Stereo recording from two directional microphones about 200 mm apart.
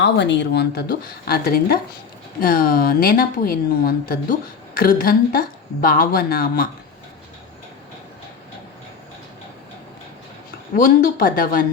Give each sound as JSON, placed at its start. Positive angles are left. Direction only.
{"t": 0.0, "sound": "a woman's voice", "side_deg": 60}
{"t": 10.8, "sound": "a woman's voice", "side_deg": 45}